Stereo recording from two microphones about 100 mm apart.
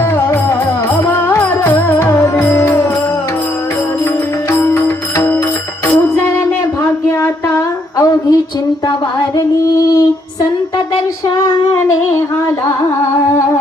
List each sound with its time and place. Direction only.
1.0 s music: 20° left (ahead or behind)
4.5 s music: 25° left (ahead or behind)
7.9 s a sound: 35° left (ahead or behind)